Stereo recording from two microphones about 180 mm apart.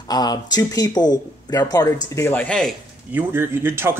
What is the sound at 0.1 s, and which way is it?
Speech, 20° left (ahead or behind).